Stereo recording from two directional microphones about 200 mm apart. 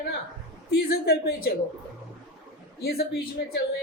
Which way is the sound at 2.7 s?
50° left (ahead or behind).